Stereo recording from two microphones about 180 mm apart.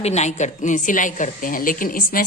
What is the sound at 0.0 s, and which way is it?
A woman's voice, 40° left (ahead or behind).